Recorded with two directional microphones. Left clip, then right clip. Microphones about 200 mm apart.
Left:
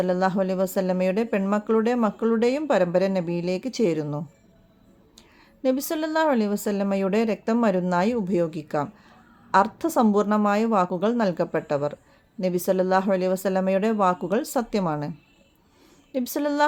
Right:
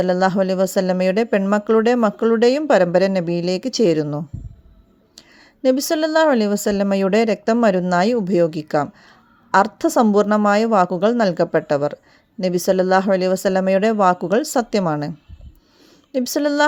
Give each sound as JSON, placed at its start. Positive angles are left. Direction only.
{"t": 0.0, "sound": "speech", "side_deg": -35}
{"t": 5.6, "sound": "speech", "side_deg": -30}
{"t": 16.1, "sound": "speech", "side_deg": -30}